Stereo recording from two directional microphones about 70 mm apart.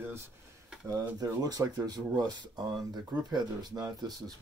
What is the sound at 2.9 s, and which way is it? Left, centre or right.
Speech, right.